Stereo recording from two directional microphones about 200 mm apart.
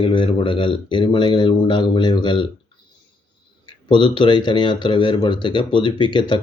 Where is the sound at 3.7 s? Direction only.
25° left (ahead or behind).